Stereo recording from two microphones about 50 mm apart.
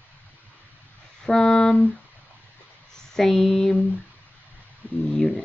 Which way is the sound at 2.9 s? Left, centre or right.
Centre.